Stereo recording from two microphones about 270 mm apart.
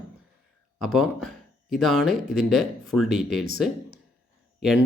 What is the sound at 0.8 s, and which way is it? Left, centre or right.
Speech, centre.